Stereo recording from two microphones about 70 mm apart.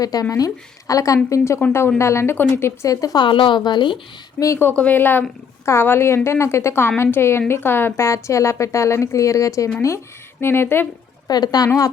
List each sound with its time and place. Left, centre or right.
0.0 s speech: left
1.5 s a woman's voice: left
2.8 s speech: left
4.4 s speech: left
4.8 s a woman's voice: left
8.0 s speech: left
10.4 s a woman's voice: left
11.3 s speech: left